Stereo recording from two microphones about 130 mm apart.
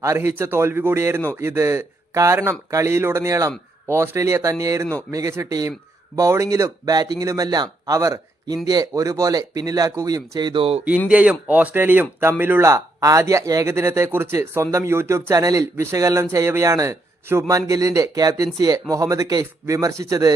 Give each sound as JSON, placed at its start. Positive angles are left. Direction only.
{"t": 0.0, "sound": "speech", "side_deg": -20}
{"t": 11.1, "sound": "speech", "side_deg": -10}